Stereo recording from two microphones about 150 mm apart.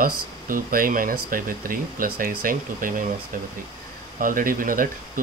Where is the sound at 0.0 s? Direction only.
70° right (ahead or behind).